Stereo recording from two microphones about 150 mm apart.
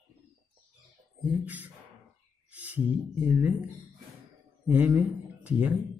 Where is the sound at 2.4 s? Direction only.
10° right (ahead or behind).